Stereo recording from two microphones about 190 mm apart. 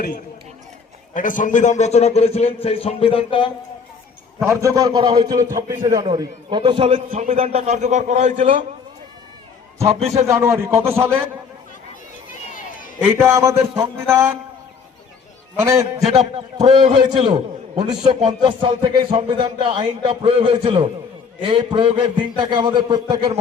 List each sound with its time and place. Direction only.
1.1 s a man's voice: 45° left (ahead or behind); by 3.5 s 25° left (ahead or behind)
4.4 s a man's voice: 15° right (ahead or behind)
9.8 s a man's voice: 35° right (ahead or behind)
10.2 s a man's voice: 15° right (ahead or behind)
13.0 s a man's voice: 10° right (ahead or behind)
15.6 s a man's voice: 15° right (ahead or behind)
16.0 s a man's voice: 35° right (ahead or behind)
18.2 s a man's voice: 30° right (ahead or behind)